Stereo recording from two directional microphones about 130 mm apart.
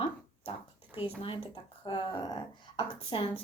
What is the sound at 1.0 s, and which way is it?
Speech, 40° left (ahead or behind).